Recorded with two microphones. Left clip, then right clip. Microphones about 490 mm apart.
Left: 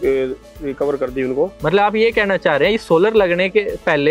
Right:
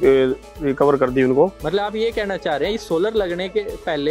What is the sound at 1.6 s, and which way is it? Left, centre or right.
Speech, left.